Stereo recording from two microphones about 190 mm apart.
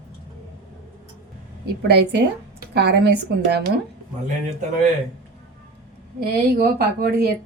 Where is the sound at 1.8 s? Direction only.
60° right (ahead or behind).